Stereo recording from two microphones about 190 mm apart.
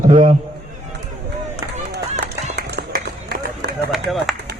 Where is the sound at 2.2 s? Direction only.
60° right (ahead or behind).